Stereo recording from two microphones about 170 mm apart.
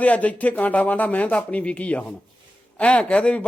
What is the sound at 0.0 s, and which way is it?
A man's voice, 10° left (ahead or behind).